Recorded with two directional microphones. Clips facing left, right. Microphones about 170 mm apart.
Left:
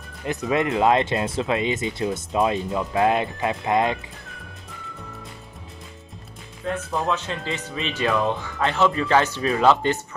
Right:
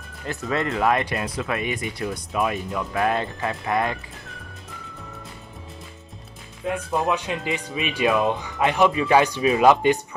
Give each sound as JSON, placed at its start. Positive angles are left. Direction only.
{"t": 0.2, "sound": "speech", "side_deg": 15}
{"t": 6.6, "sound": "speech", "side_deg": -15}